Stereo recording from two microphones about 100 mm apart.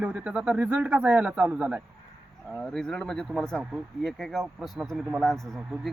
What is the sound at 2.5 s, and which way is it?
A man's voice, 5° left (ahead or behind).